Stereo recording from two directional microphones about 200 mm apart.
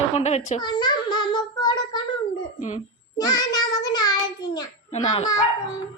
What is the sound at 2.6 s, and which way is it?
Speech, 35° left (ahead or behind).